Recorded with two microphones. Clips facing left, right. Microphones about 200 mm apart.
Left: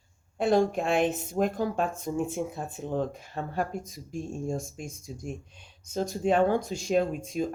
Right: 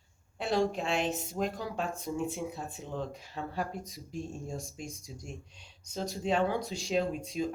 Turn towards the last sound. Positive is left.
turn(degrees=50)  # may be behind; listen again after turning